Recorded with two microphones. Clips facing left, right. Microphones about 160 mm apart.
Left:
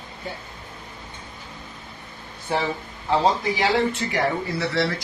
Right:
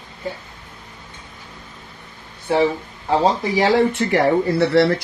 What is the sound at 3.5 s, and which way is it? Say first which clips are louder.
Speech: right 6 dB; 55° right (ahead or behind).